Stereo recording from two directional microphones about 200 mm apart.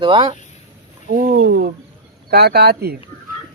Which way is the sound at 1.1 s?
50° right (ahead or behind).